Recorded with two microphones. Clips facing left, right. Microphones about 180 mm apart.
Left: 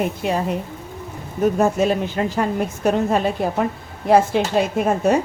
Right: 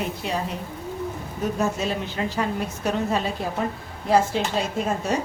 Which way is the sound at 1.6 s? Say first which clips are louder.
Left 6 dB; 55° left (ahead or behind).